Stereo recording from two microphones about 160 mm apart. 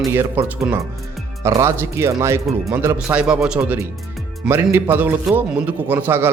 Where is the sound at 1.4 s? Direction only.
15° right (ahead or behind).